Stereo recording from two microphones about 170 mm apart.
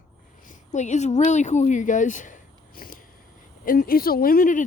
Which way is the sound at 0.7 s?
45° left (ahead or behind).